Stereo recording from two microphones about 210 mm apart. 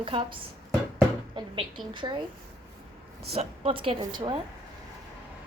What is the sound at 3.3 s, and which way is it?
A woman's voice, 25° right (ahead or behind).